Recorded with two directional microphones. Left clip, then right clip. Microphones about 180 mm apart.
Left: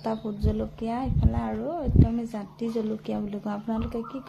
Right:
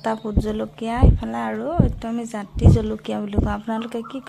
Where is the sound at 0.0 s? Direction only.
20° right (ahead or behind).